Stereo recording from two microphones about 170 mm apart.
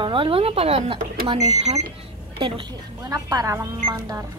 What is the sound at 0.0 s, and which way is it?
A woman's voice, 30° right (ahead or behind).